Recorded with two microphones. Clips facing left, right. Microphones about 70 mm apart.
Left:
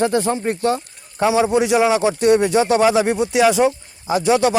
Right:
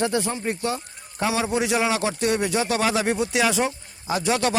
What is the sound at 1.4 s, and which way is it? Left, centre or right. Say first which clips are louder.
Speech: left 7 dB; left.